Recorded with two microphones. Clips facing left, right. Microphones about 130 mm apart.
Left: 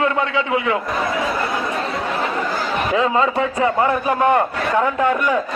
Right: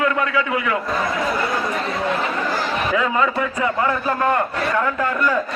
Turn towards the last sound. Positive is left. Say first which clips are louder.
# left 3 dB
turn(degrees=20)  # may be behind; listen again after turning